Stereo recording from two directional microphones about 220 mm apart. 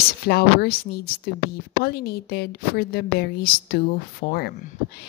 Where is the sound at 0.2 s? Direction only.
45° left (ahead or behind).